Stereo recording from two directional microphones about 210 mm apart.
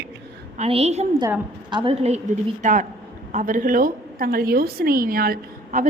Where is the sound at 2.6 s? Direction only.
40° right (ahead or behind).